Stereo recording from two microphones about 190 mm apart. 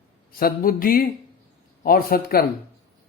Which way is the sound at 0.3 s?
50° left (ahead or behind).